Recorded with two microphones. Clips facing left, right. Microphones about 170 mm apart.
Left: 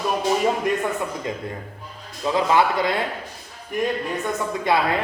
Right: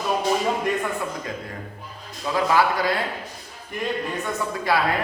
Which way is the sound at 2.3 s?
20° left (ahead or behind).